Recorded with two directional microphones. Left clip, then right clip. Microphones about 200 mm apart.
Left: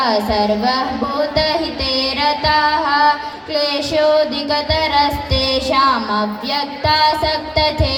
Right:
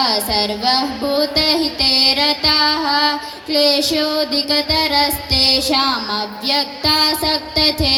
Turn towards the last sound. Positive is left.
turn(degrees=-30)  # may be behind; listen again after turning